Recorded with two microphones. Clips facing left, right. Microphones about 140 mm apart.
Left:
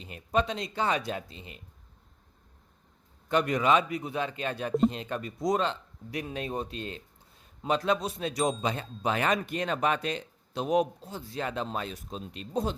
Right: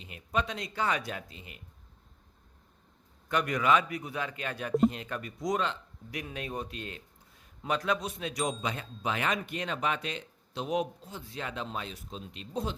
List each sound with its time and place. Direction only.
0.0 s a man's voice: 35° left (ahead or behind)
3.2 s a man's voice: 25° left (ahead or behind); by 12.7 s 45° left (ahead or behind)